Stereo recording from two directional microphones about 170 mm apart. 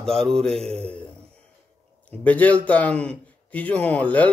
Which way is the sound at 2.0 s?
10° left (ahead or behind).